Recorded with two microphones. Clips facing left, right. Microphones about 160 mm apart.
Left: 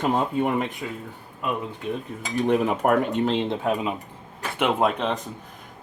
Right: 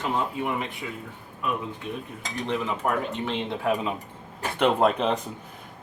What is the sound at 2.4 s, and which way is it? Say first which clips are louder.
Speech: left 6 dB; 55° left (ahead or behind).